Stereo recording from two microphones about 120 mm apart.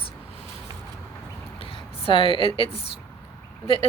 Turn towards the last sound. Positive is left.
turn(degrees=50)  # may be behind; listen again after turning